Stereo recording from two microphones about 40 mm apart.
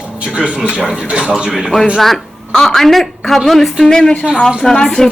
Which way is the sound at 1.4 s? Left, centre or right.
Centre.